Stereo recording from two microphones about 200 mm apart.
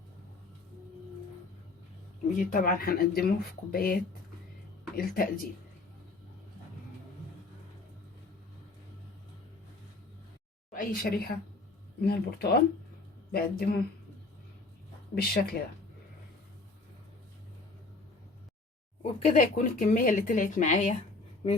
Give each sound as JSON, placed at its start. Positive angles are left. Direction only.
{"t": 2.4, "sound": "speech", "side_deg": 45}
{"t": 4.9, "sound": "speech", "side_deg": 45}
{"t": 10.7, "sound": "a woman's voice", "side_deg": 45}
{"t": 15.1, "sound": "speech", "side_deg": 50}
{"t": 19.2, "sound": "speech", "side_deg": 35}